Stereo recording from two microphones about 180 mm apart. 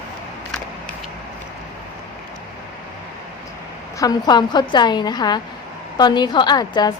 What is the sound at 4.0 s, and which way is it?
A woman's voice, 20° left (ahead or behind).